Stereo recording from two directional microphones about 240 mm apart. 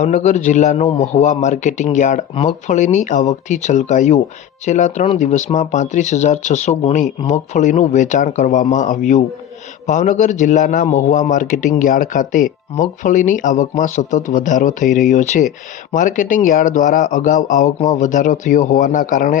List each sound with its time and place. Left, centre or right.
0.0 s a man's voice: left